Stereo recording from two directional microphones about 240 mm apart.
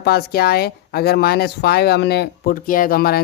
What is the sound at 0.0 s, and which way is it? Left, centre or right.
Speech, left.